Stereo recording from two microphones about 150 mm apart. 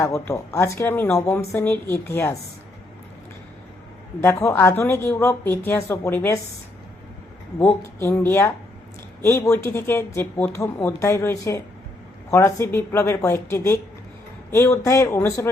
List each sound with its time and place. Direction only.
0.0 s a woman's voice: 20° left (ahead or behind)
4.2 s a woman's voice: 20° left (ahead or behind)
7.6 s a woman's voice: 15° left (ahead or behind)